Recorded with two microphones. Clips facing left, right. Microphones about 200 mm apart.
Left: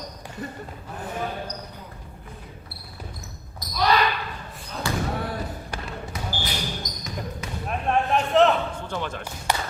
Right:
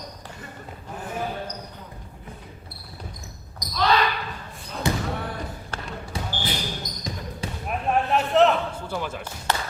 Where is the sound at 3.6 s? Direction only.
15° right (ahead or behind).